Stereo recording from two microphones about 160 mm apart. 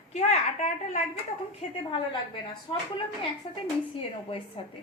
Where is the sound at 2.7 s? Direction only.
35° left (ahead or behind).